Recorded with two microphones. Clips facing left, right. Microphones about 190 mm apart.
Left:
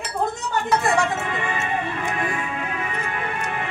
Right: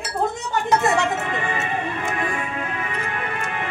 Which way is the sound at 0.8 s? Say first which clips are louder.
Right 1 dB; 25° right (ahead or behind).